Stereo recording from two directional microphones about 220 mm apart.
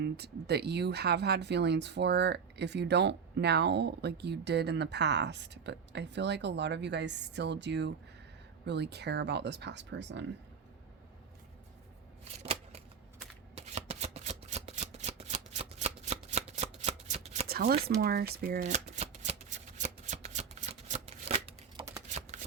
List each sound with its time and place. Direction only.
0.0 s speech: 50° right (ahead or behind)
12.2 s scissors: 30° right (ahead or behind)
13.6 s shuffling cards: 30° right (ahead or behind)
17.5 s a sound: 45° right (ahead or behind)
17.8 s shuffling cards: 45° right (ahead or behind); by 21.8 s 25° right (ahead or behind)